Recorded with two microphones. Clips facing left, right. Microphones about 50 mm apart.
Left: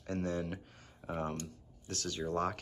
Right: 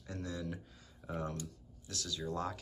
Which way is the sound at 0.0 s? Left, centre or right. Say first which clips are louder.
Left 6 dB; left.